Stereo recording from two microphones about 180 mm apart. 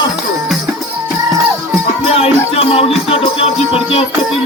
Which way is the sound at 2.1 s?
35° left (ahead or behind).